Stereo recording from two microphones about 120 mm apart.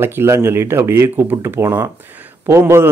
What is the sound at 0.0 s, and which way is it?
A man's voice, 20° right (ahead or behind).